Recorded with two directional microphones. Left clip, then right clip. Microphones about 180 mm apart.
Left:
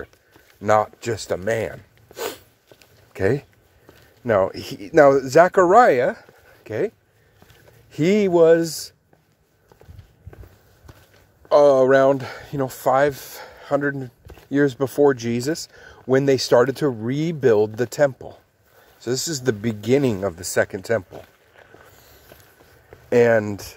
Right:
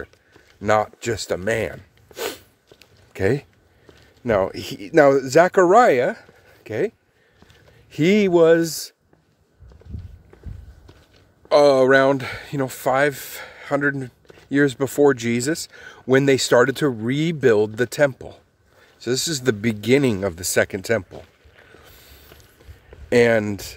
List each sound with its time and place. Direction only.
0.6 s speech: 15° right (ahead or behind)
2.8 s a sound: 15° right (ahead or behind)
4.2 s speech: 20° right (ahead or behind)
7.9 s speech: 20° right (ahead or behind)
11.4 s speech: 20° right (ahead or behind)
23.0 s speech: 20° right (ahead or behind)